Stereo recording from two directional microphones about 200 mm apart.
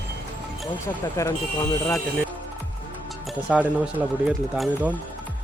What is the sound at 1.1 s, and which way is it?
Speech, 15° left (ahead or behind).